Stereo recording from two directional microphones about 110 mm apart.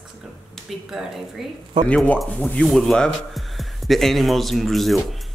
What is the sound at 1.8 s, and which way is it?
Speech, 45° right (ahead or behind).